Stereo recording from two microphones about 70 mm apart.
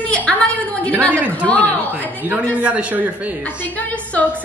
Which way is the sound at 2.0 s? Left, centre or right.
Right.